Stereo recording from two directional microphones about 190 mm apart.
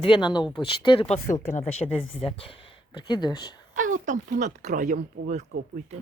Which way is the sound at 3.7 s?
45° right (ahead or behind).